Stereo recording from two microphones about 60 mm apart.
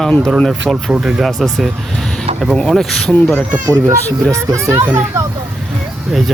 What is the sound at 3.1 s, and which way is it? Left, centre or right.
Speech, left.